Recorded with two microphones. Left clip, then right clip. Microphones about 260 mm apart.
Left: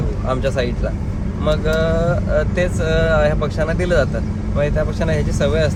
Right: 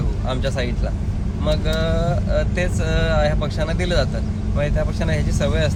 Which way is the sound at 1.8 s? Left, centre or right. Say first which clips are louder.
Left 4 dB; right.